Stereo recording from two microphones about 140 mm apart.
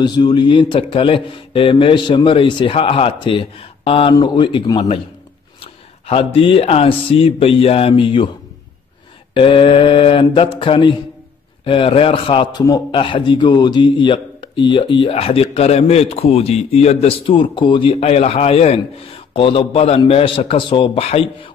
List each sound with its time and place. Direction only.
0.0 s a man's voice: 30° left (ahead or behind)
9.3 s a man's voice: 40° left (ahead or behind)
12.6 s a man's voice: 25° left (ahead or behind)
13.0 s a man's voice: 35° left (ahead or behind)